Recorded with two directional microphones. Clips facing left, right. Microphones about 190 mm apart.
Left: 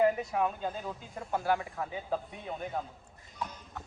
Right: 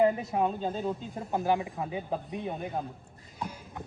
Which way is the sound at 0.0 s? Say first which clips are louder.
Right 2 dB; 25° right (ahead or behind).